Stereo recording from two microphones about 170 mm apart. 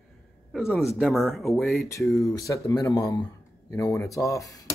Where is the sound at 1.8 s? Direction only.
15° left (ahead or behind).